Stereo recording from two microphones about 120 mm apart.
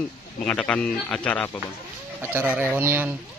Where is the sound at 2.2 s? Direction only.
15° right (ahead or behind).